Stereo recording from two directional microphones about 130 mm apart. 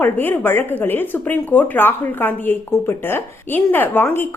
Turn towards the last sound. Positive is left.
turn(degrees=15)  # may be behind; listen again after turning